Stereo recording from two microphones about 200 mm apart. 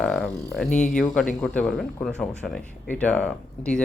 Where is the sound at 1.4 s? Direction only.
5° left (ahead or behind).